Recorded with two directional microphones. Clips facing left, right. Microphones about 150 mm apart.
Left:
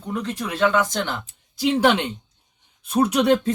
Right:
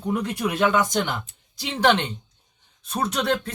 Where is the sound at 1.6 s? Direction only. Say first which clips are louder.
Left 3 dB; 5° left (ahead or behind).